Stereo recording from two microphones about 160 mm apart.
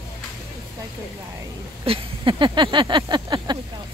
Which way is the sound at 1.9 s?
35° right (ahead or behind).